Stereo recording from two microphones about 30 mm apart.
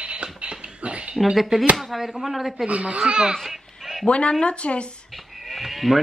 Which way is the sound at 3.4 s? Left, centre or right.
Centre.